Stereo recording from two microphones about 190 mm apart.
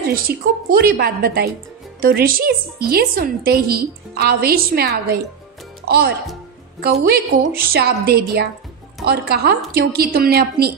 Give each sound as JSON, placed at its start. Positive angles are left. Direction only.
{"t": 0.3, "sound": "a woman's voice", "side_deg": -55}